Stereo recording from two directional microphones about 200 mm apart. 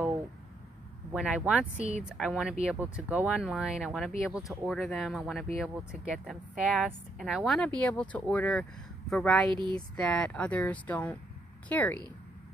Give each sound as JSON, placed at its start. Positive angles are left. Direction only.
{"t": 1.1, "sound": "a woman's voice", "side_deg": -5}
{"t": 9.5, "sound": "speech", "side_deg": -20}
{"t": 9.8, "sound": "speech", "side_deg": 5}